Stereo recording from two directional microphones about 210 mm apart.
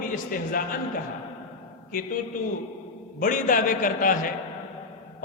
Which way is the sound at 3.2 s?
40° left (ahead or behind).